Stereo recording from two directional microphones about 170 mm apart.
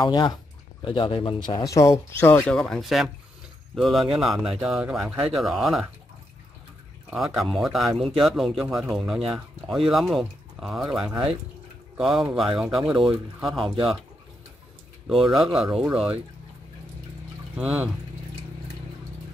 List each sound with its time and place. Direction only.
0.0 s speech: 25° left (ahead or behind)
2.5 s speech: centre (ahead or behind)
7.1 s speech: centre (ahead or behind)
15.0 s speech: centre (ahead or behind)
17.6 s speech: 5° right (ahead or behind)